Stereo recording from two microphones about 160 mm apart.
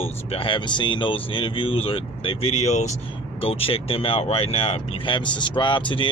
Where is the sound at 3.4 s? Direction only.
35° left (ahead or behind).